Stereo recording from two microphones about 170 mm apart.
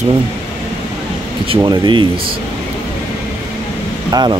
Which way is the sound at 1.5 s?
25° right (ahead or behind).